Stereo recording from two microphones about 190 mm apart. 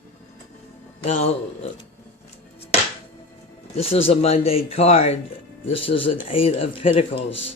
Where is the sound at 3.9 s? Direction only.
30° left (ahead or behind).